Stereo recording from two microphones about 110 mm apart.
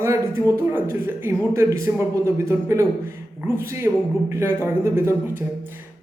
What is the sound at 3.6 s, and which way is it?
A man's voice, 25° right (ahead or behind).